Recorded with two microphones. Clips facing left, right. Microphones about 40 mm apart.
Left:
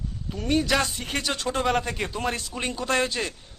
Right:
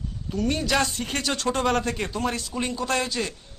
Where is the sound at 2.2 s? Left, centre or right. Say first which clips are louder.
Right 1 dB; left.